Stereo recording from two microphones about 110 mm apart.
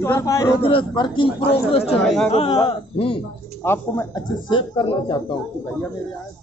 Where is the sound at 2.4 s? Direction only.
50° left (ahead or behind).